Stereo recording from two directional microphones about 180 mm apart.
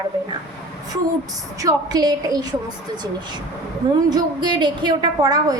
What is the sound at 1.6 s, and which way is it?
A woman's voice, 20° right (ahead or behind).